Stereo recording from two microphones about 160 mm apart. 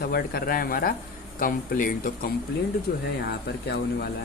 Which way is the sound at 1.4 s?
55° left (ahead or behind).